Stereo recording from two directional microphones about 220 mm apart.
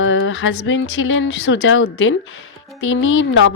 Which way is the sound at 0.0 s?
60° left (ahead or behind).